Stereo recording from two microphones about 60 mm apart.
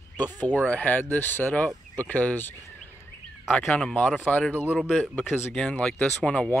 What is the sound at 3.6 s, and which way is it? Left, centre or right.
Speech, centre.